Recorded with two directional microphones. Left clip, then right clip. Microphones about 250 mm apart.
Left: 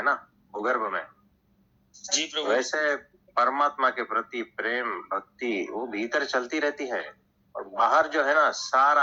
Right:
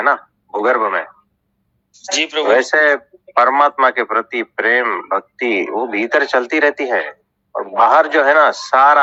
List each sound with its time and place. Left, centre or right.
0.0 s speech: right